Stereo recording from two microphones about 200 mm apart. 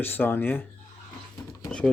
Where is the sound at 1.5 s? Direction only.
15° left (ahead or behind).